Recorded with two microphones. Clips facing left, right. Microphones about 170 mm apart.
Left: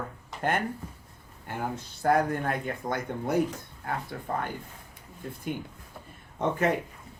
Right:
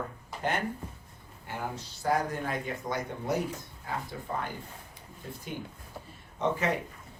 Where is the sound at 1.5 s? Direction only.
55° left (ahead or behind).